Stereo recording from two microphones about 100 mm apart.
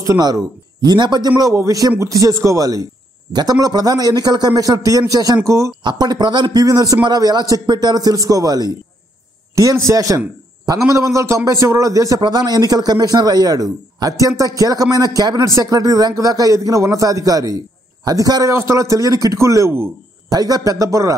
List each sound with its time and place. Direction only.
0.0 s a man's voice: 40° right (ahead or behind)
1.5 s a man's voice: 30° right (ahead or behind)
5.9 s a man's voice: 45° right (ahead or behind)
12.2 s a man's voice: 45° right (ahead or behind); by 19.9 s 25° right (ahead or behind)
20.2 s a man's voice: 40° right (ahead or behind)